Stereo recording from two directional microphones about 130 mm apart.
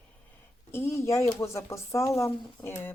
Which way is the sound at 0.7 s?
20° left (ahead or behind).